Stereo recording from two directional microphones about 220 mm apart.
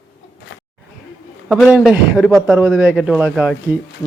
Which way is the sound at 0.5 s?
55° left (ahead or behind).